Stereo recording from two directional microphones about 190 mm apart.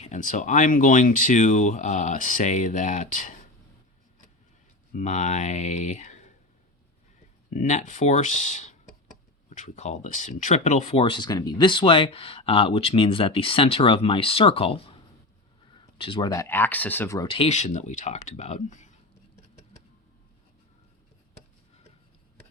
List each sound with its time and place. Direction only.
0.0 s speech: 40° left (ahead or behind)
4.9 s speech: 40° left (ahead or behind)
7.5 s speech: 40° left (ahead or behind); by 17.2 s 15° left (ahead or behind)
17.2 s speech: 30° left (ahead or behind)